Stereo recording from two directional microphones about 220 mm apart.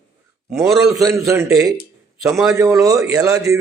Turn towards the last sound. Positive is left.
turn(degrees=-15)  # may be behind; listen again after turning